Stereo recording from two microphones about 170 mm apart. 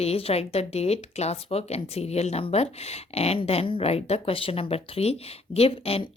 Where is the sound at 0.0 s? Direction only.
35° left (ahead or behind).